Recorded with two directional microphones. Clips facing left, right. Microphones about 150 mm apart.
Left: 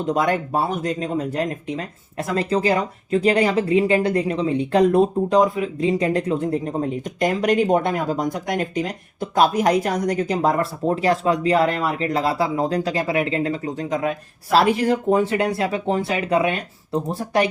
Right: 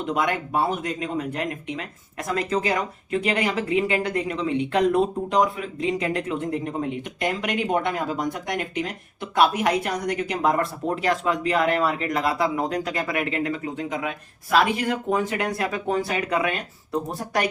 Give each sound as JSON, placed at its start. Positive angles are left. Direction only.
{"t": 0.0, "sound": "speech", "side_deg": 35}